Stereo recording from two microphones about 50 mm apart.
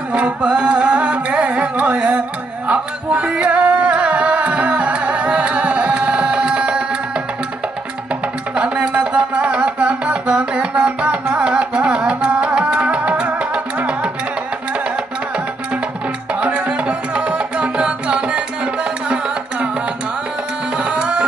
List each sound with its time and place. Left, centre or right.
0.1 s music: right
8.5 s music: right
16.3 s music: right
20.7 s music: right